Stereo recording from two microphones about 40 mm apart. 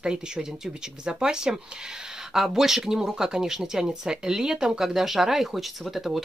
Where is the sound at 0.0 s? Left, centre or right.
Right.